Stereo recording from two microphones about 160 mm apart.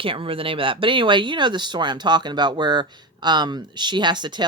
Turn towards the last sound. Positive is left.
turn(degrees=-25)  # may be behind; listen again after turning